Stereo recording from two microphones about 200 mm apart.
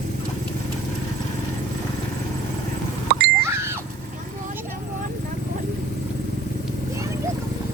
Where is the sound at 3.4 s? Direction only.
10° right (ahead or behind).